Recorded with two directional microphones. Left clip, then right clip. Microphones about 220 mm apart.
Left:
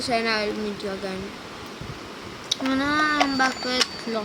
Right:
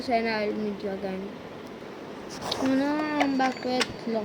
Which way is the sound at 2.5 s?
10° left (ahead or behind).